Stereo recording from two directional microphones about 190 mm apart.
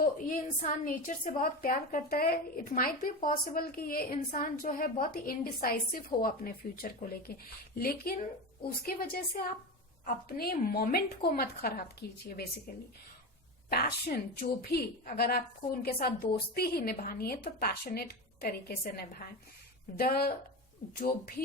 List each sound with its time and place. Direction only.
0.0 s a woman's voice: 45° left (ahead or behind)
13.7 s speech: 55° left (ahead or behind)